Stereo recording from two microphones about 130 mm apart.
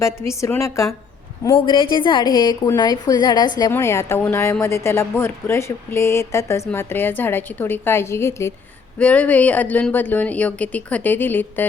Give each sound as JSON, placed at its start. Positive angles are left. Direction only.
{"t": 0.0, "sound": "speech", "side_deg": 20}
{"t": 1.5, "sound": "a woman's voice", "side_deg": 40}
{"t": 3.7, "sound": "a woman's voice", "side_deg": 20}
{"t": 9.0, "sound": "a woman's voice", "side_deg": 10}